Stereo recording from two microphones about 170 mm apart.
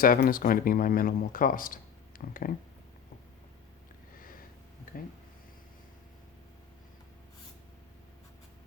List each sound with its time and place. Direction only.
0.0 s speech: 55° left (ahead or behind)